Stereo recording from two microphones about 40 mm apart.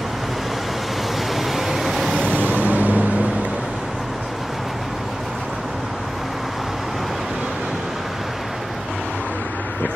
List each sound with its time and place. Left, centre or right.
1.3 s vehicle: centre
2.2 s vehicle: right